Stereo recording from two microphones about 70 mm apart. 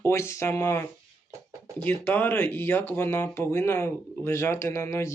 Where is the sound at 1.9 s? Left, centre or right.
Left.